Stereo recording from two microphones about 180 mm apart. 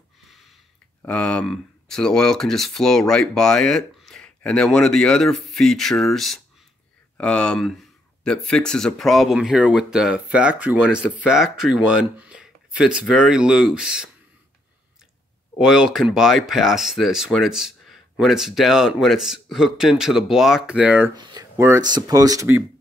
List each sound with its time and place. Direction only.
1.0 s speech: 5° left (ahead or behind)
15.5 s speech: 5° right (ahead or behind)
21.1 s speech: 25° right (ahead or behind)